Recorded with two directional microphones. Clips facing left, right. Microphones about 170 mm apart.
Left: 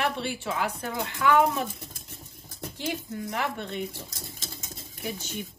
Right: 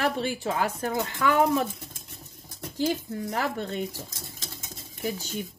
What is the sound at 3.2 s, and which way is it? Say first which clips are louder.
Speech: right 3 dB; 35° right (ahead or behind).